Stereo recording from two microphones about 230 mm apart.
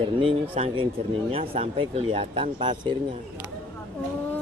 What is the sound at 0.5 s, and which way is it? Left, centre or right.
Speech, right.